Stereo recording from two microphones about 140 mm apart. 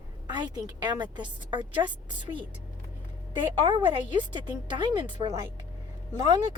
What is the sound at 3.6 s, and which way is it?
Speech, 35° right (ahead or behind).